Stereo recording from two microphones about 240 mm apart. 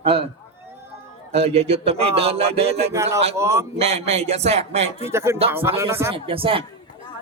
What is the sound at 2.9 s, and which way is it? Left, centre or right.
Speech, centre.